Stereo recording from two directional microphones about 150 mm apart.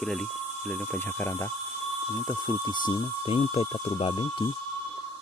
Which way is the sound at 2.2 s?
30° left (ahead or behind).